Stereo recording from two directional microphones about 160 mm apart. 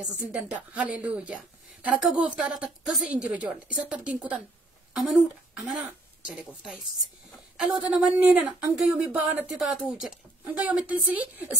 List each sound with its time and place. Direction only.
0.0 s a woman's voice: 5° right (ahead or behind)